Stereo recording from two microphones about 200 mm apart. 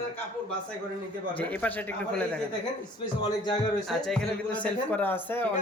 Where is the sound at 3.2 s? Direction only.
20° left (ahead or behind).